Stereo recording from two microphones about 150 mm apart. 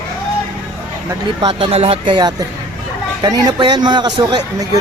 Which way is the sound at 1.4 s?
30° right (ahead or behind).